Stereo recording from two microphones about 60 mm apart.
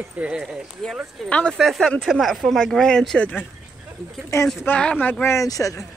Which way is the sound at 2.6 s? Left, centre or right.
Centre.